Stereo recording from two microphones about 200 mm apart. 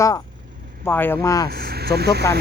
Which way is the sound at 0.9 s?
10° left (ahead or behind).